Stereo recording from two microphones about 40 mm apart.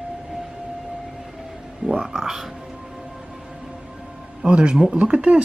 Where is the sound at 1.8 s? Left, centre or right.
Right.